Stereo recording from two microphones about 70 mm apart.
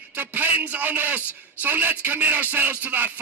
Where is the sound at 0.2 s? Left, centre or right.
Right.